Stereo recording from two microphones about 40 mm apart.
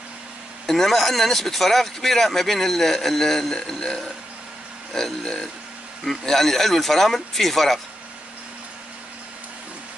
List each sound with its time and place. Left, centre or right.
0.7 s speech: centre